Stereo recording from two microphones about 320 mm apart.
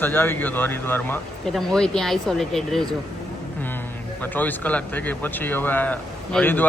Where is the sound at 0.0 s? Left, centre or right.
Centre.